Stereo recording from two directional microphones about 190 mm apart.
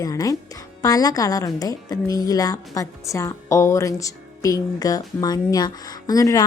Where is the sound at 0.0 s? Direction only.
20° left (ahead or behind).